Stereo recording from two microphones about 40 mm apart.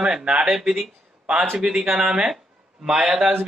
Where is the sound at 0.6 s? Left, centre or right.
Centre.